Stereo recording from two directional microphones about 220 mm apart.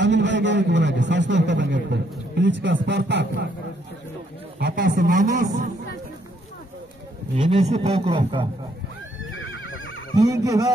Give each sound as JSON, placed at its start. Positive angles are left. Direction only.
{"t": 0.0, "sound": "a man's voice", "side_deg": -55}
{"t": 4.6, "sound": "a man's voice", "side_deg": -45}
{"t": 7.3, "sound": "a man's voice", "side_deg": -25}
{"t": 9.4, "sound": "neigh", "side_deg": 65}
{"t": 10.1, "sound": "speech", "side_deg": -15}